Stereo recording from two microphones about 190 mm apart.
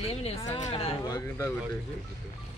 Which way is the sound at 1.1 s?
15° left (ahead or behind).